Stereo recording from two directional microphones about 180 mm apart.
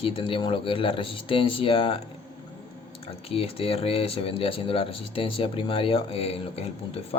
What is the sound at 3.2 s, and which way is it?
Speech, 30° left (ahead or behind).